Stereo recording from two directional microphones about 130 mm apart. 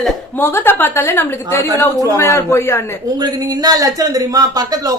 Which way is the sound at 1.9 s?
30° right (ahead or behind).